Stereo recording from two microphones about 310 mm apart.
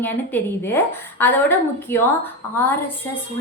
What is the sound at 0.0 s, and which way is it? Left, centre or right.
A woman's voice, centre.